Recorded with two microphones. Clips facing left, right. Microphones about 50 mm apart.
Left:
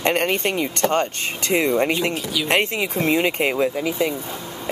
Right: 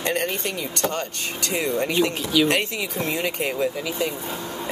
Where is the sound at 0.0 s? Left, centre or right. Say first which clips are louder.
Left 5 dB; left.